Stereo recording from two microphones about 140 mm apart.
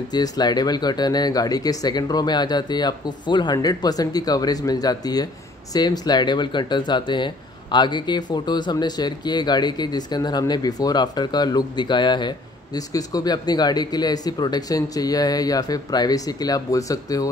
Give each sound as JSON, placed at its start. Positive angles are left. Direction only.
{"t": 0.1, "sound": "speech", "side_deg": 30}